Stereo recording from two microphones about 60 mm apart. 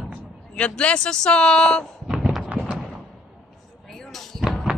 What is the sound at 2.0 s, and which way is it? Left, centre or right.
Thunk, centre.